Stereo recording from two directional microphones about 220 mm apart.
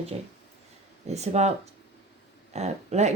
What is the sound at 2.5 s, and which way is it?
Speech, 30° right (ahead or behind).